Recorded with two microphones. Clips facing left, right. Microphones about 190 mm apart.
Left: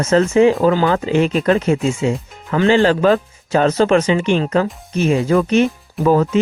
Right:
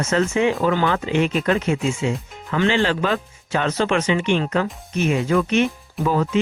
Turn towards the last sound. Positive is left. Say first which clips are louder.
# left 6 dB
turn(degrees=45)  # may be behind; listen again after turning